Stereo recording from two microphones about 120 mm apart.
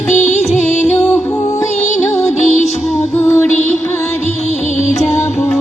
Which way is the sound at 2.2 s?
80° left.